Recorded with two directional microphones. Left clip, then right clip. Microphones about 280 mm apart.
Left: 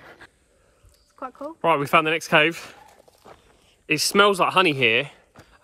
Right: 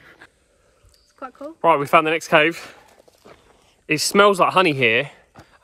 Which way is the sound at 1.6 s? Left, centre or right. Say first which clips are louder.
Right 3 dB; centre.